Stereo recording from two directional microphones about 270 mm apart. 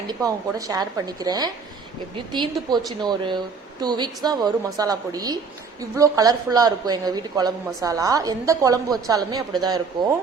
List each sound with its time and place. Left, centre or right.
0.1 s a woman's voice: centre